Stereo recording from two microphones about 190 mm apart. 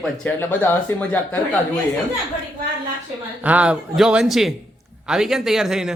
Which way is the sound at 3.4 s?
5° right (ahead or behind).